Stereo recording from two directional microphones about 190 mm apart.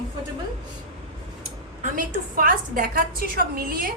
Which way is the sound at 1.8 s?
45° right (ahead or behind).